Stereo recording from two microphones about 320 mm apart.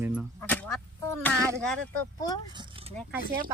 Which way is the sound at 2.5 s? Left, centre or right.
Centre.